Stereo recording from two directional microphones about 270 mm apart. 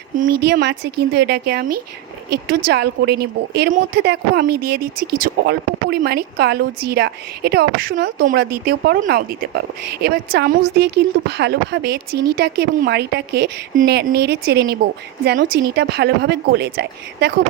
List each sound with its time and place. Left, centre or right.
0.4 s a woman's voice: right
2.6 s a woman's voice: right